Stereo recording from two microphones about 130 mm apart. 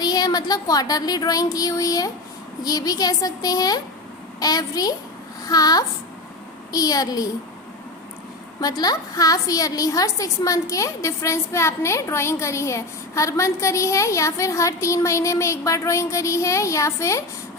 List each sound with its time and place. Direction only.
0.0 s a woman's voice: 30° left (ahead or behind)
8.6 s a woman's voice: 30° left (ahead or behind)